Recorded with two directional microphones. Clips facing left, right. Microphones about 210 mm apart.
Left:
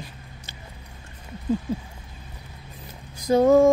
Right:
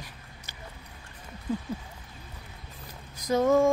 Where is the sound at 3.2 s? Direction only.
30° left (ahead or behind).